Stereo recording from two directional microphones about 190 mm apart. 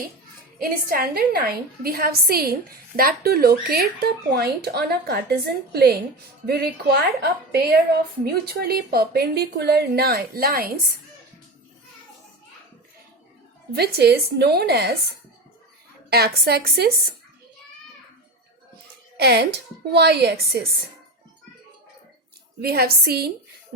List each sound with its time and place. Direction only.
0.6 s a woman's voice: 50° right (ahead or behind)
13.7 s a woman's voice: 60° right (ahead or behind)
16.0 s a woman's voice: 55° right (ahead or behind)
19.1 s a woman's voice: 55° right (ahead or behind)
22.6 s a woman's voice: 55° right (ahead or behind)